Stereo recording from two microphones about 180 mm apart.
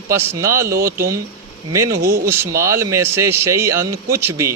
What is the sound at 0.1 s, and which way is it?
Speech, 15° right (ahead or behind).